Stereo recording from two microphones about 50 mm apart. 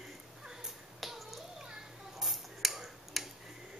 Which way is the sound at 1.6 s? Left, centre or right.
Centre.